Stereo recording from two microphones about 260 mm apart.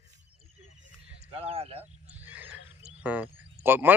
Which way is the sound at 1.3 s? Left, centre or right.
Right.